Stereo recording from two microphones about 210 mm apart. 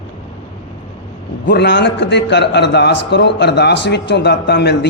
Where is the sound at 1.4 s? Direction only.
55° left (ahead or behind).